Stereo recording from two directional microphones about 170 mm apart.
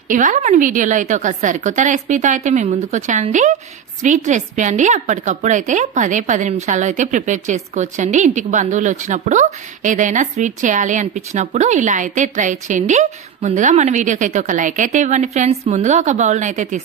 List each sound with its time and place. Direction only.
0.1 s a woman's voice: 50° right (ahead or behind)